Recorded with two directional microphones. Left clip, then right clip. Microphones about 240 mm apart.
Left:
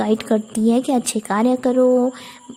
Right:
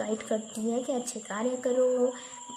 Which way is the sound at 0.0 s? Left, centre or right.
Left.